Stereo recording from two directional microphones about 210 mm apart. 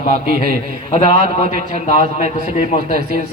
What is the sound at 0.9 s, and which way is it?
A man's voice, 30° left (ahead or behind).